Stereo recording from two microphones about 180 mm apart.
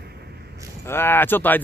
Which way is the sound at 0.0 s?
65° right (ahead or behind).